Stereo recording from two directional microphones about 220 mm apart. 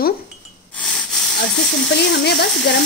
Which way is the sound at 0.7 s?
5° left (ahead or behind).